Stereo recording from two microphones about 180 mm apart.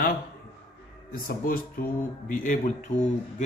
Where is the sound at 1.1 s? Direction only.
50° left (ahead or behind).